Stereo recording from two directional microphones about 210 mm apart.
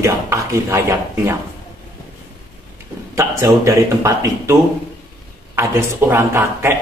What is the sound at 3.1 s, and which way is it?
A man's voice, 15° right (ahead or behind).